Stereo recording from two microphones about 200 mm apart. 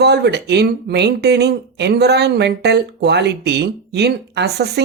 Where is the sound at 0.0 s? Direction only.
55° right (ahead or behind).